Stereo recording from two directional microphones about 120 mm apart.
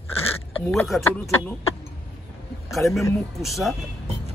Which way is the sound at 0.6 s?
20° left (ahead or behind).